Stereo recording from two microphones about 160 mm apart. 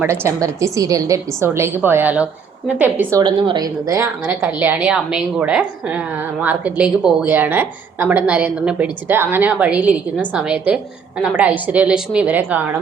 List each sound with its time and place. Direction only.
0.0 s a woman's voice: 15° right (ahead or behind)
3.2 s a woman's voice: 30° right (ahead or behind); by 12.6 s 10° right (ahead or behind)